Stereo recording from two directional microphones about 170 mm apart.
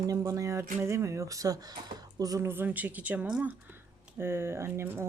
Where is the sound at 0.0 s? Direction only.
20° right (ahead or behind).